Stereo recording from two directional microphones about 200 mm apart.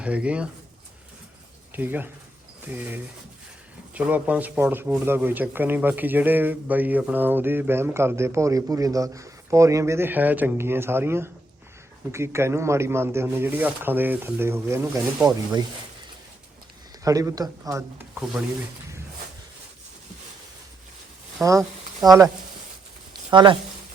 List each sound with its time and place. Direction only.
0.0 s speech: 5° right (ahead or behind)
1.7 s speech: 10° right (ahead or behind)
17.0 s speech: 15° right (ahead or behind)
21.4 s speech: 15° right (ahead or behind)
23.3 s speech: 25° right (ahead or behind)